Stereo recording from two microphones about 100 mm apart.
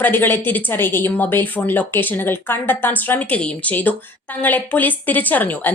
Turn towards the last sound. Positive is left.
turn(degrees=15)  # may be behind; listen again after turning